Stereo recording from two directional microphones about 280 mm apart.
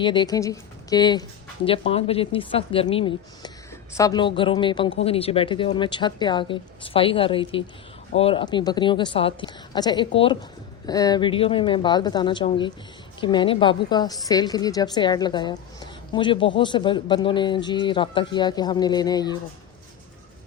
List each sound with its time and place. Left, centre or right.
0.0 s a woman's voice: centre